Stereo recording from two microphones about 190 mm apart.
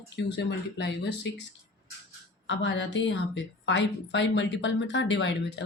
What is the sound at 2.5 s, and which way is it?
A woman's voice, 75° left (ahead or behind).